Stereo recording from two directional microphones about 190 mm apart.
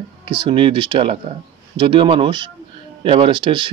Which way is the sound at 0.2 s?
25° right (ahead or behind).